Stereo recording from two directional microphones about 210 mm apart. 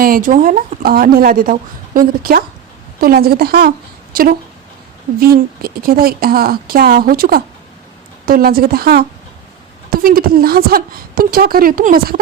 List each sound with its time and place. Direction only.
0.0 s speech: 40° right (ahead or behind)